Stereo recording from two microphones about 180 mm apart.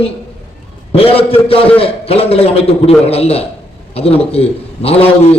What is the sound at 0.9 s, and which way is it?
A man's voice, 30° left (ahead or behind).